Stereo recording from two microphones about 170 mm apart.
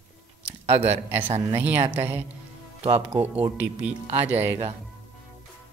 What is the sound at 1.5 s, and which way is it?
Speech, 10° right (ahead or behind).